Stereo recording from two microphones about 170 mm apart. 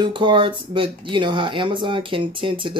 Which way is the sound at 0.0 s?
30° right (ahead or behind).